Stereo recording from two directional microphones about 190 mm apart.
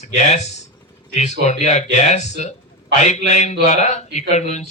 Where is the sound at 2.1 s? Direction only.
40° left (ahead or behind).